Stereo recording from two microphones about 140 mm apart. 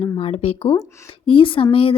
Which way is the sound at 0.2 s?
45° left (ahead or behind).